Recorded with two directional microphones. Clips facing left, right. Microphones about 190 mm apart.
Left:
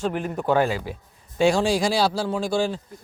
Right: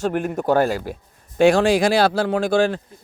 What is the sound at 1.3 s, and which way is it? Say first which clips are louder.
Speech: right 5 dB; 55° right (ahead or behind).